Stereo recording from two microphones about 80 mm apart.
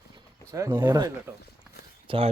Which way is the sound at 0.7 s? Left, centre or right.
Right.